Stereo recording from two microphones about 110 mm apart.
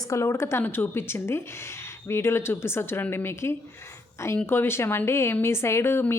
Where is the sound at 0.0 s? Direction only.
30° left (ahead or behind).